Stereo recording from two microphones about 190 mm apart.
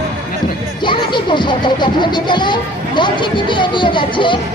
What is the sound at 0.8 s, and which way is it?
A child's voice, 25° left (ahead or behind).